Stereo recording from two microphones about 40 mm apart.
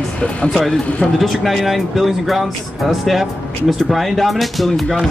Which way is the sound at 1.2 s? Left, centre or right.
Centre.